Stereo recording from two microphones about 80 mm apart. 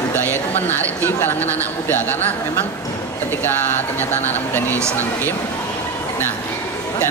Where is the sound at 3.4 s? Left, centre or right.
Left.